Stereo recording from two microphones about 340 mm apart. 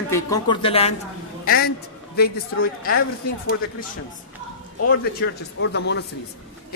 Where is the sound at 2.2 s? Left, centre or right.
Left.